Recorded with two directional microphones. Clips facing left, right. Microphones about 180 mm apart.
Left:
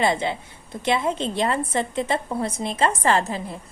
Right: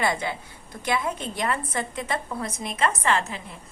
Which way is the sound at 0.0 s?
25° left (ahead or behind).